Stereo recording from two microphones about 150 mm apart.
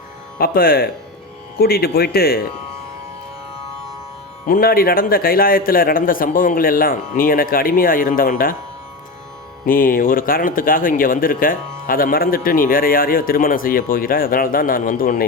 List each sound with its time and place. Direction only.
0.3 s speech: 80° left
1.5 s speech: 90° left
4.4 s speech: 70° left (ahead or behind)
9.6 s speech: 70° left (ahead or behind)